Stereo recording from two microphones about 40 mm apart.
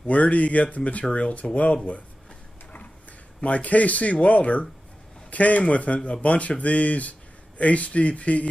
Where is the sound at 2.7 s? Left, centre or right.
Left.